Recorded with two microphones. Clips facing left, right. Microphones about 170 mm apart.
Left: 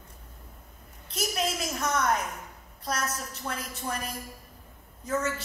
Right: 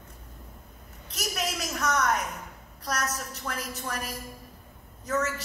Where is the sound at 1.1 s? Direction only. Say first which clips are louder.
Left 2 dB; 30° left (ahead or behind).